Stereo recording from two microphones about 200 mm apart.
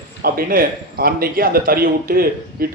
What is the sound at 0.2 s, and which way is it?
Speech, 45° right (ahead or behind).